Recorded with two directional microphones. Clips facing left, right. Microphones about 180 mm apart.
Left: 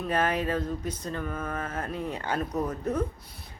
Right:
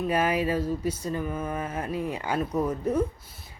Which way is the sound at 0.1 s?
10° right (ahead or behind).